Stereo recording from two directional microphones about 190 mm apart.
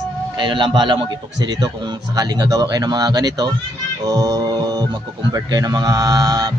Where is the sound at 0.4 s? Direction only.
25° right (ahead or behind).